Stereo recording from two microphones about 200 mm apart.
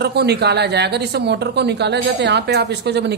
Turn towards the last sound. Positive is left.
turn(degrees=-55)  # may be behind; listen again after turning